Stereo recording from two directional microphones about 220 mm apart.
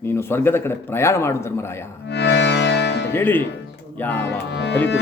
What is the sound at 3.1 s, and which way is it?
A man's voice, 10° left (ahead or behind).